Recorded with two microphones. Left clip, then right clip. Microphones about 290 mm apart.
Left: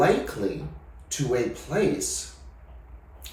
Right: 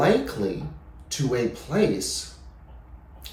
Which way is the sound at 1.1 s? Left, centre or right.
Centre.